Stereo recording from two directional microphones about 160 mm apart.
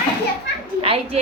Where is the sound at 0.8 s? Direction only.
35° right (ahead or behind).